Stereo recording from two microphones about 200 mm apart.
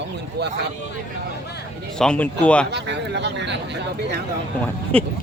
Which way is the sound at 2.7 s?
60° right (ahead or behind).